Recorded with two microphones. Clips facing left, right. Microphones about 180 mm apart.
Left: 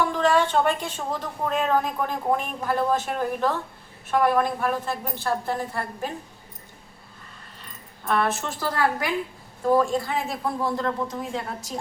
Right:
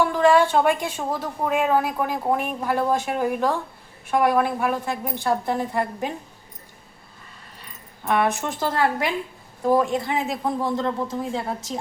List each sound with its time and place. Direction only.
0.2 s speech: 10° right (ahead or behind)
8.0 s a man's voice: 15° right (ahead or behind)